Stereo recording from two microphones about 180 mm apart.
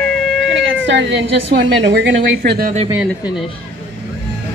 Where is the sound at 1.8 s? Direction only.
65° right (ahead or behind).